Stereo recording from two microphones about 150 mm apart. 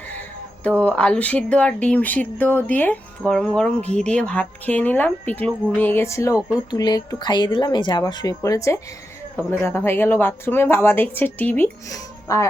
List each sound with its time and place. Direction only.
0.8 s speech: 10° left (ahead or behind)